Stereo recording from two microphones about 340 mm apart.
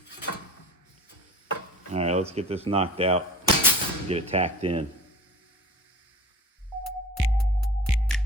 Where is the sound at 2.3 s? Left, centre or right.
Centre.